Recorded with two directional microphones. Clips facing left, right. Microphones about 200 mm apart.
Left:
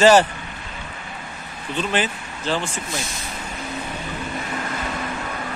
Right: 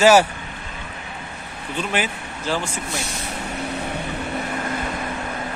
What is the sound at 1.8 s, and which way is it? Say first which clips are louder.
Speech: left 1 dB; 10° right (ahead or behind).